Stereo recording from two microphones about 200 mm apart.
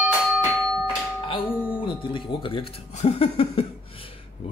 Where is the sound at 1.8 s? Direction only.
25° left (ahead or behind).